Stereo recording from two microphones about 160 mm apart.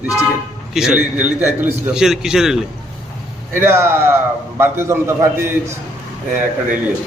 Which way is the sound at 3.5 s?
15° right (ahead or behind).